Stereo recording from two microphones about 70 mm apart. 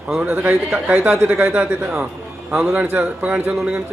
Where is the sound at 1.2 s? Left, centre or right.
Right.